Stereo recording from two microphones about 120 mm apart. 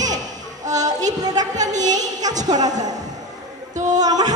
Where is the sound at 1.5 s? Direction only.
90° right.